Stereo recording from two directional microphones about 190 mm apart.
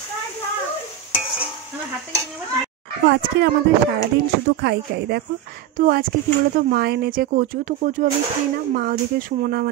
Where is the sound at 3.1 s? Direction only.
60° right (ahead or behind).